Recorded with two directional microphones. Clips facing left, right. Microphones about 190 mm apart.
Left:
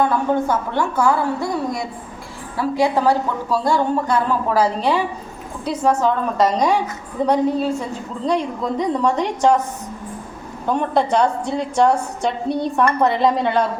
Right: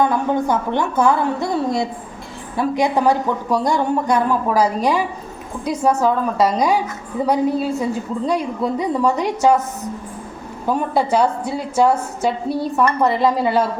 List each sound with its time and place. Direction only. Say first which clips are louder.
0.0 s a woman's voice: even; 15° right (ahead or behind)
10.7 s a woman's voice: even; 5° right (ahead or behind)